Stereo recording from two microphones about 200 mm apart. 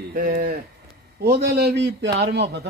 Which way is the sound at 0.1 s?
45° right (ahead or behind).